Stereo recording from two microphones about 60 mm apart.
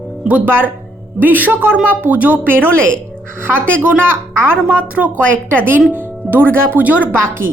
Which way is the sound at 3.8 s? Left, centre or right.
Right.